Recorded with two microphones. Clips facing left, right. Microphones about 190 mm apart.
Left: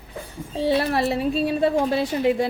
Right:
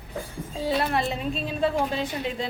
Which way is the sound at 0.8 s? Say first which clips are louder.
Left 4 dB; 70° left (ahead or behind).